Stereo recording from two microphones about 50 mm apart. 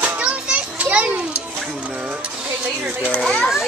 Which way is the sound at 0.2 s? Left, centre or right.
Right.